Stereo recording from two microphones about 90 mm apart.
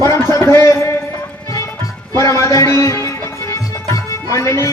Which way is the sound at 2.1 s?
35° left (ahead or behind).